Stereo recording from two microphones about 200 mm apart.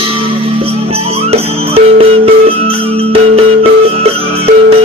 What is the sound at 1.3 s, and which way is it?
Music, 30° right (ahead or behind).